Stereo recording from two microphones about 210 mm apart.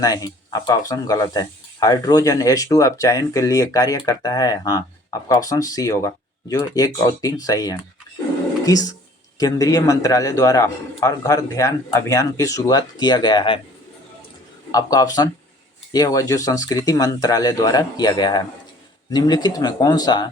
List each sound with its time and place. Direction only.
0.0 s speech: 20° left (ahead or behind)
14.7 s speech: 15° left (ahead or behind)